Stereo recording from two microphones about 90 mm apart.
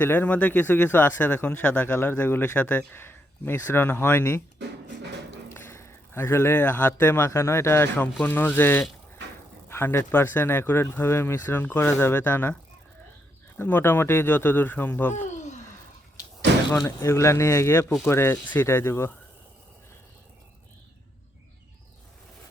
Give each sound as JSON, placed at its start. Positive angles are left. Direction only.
{"t": 0.0, "sound": "speech", "side_deg": 20}
{"t": 5.5, "sound": "a man's voice", "side_deg": 25}
{"t": 13.6, "sound": "speech", "side_deg": 25}
{"t": 16.8, "sound": "speech", "side_deg": 30}